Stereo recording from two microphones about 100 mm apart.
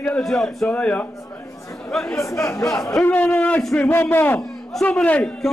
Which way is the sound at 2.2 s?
30° left (ahead or behind).